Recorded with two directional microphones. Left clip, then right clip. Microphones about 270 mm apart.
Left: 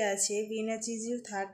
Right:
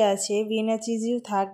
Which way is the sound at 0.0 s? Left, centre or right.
Right.